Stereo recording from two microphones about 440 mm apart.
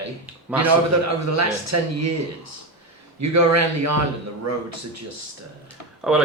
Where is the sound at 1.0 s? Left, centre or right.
Right.